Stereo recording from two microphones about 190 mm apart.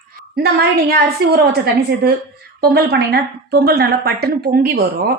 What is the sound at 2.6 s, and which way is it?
A woman's voice, 55° right (ahead or behind).